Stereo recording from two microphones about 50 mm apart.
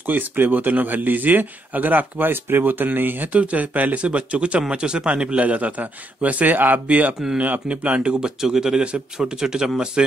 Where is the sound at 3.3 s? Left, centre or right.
Right.